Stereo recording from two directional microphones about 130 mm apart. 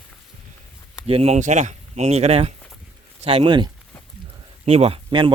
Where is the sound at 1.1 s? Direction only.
50° right (ahead or behind).